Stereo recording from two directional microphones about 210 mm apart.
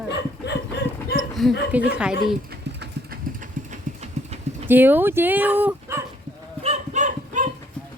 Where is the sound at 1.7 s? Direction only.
5° right (ahead or behind).